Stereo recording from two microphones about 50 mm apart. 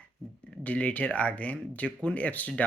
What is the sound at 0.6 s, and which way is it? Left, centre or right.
Speech, left.